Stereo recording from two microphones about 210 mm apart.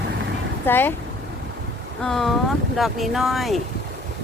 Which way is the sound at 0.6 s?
10° left (ahead or behind).